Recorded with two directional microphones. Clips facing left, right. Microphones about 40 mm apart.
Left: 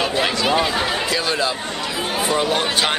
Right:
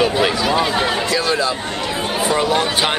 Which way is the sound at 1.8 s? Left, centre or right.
Centre.